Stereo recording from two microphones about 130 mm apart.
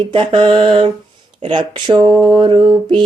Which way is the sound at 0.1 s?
45° right (ahead or behind).